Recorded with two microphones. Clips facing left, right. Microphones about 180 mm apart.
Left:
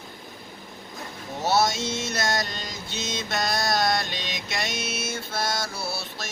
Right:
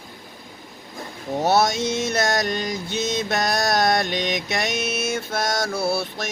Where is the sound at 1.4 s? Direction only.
55° right (ahead or behind).